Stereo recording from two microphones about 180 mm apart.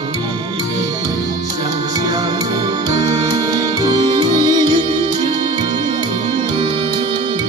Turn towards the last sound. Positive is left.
turn(degrees=-25)  # may be behind; listen again after turning